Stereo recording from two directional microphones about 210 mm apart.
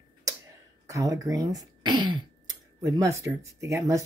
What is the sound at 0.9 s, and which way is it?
Speech, 15° right (ahead or behind).